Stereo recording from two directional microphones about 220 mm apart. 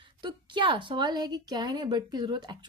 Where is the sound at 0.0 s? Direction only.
20° right (ahead or behind).